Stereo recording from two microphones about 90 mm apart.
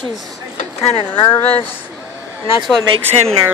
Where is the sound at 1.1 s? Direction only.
55° left (ahead or behind).